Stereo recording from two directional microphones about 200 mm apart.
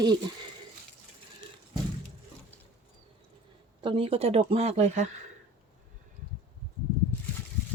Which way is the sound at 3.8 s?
25° right (ahead or behind).